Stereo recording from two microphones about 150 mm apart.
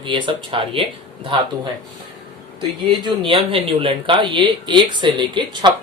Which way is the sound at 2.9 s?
35° right (ahead or behind).